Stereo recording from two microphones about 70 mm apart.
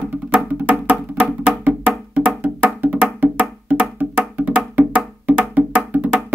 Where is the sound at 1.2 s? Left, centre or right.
Right.